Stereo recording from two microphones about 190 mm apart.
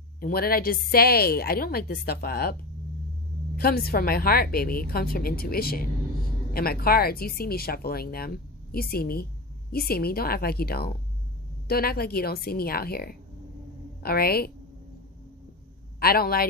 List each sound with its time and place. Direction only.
0.2 s a woman's voice: 50° left (ahead or behind)
3.5 s a woman's voice: 55° left (ahead or behind)
16.0 s a woman's voice: 55° left (ahead or behind)